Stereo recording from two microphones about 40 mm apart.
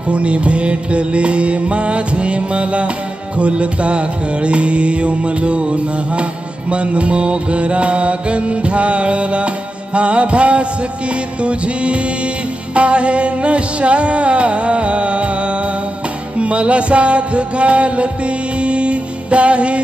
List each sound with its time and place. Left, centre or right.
0.1 s music: right
16.3 s music: right